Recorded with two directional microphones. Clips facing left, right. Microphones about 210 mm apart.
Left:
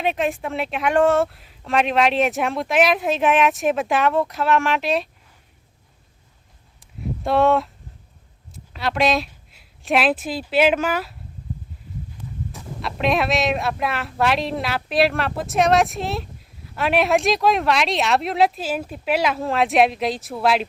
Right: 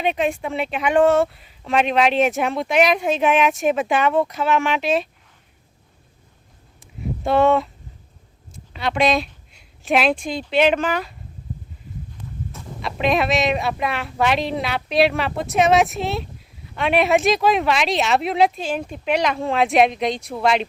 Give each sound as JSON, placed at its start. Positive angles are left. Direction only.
{"t": 0.0, "sound": "speech", "side_deg": 0}
{"t": 6.7, "sound": "a sound", "side_deg": 0}
{"t": 8.5, "sound": "a woman's voice", "side_deg": 0}
{"t": 12.5, "sound": "speech", "side_deg": 0}